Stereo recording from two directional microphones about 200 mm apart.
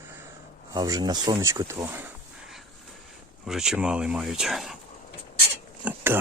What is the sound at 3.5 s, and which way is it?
Speech, centre (ahead or behind).